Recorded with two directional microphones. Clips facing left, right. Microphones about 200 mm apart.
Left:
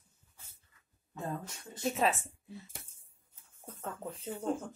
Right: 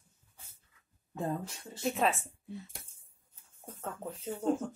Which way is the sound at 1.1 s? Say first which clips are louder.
Right 4 dB; 30° right (ahead or behind).